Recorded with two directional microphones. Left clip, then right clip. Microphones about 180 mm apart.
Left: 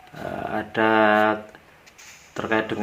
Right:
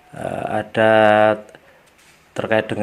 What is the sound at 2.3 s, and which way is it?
Dog, 40° right (ahead or behind).